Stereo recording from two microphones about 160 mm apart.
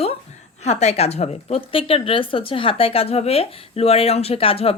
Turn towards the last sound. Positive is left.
turn(degrees=35)  # may be behind; listen again after turning